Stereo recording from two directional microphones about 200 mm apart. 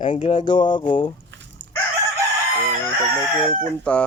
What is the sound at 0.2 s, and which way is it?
Speech, 25° left (ahead or behind).